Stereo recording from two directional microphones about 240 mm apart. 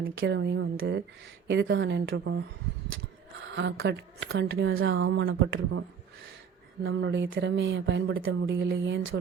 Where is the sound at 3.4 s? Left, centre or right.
Right.